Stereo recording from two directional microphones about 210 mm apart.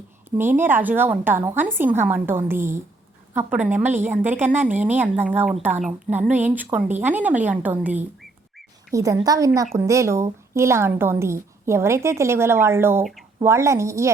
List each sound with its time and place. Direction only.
0.3 s a woman's voice: 10° right (ahead or behind)
8.9 s a woman's voice: 15° right (ahead or behind)